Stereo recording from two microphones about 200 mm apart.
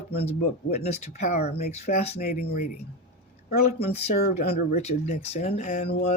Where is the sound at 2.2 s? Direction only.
50° left (ahead or behind).